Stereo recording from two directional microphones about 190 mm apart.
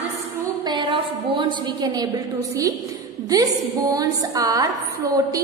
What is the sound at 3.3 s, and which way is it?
A woman's voice, 20° right (ahead or behind).